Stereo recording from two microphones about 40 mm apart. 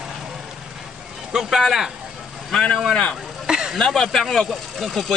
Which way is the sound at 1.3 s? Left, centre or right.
Centre.